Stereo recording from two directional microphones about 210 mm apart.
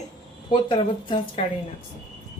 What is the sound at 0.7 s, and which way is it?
Speech, 25° left (ahead or behind).